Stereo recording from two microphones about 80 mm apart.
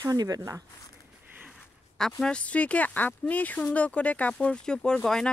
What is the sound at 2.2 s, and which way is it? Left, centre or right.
Speech, centre.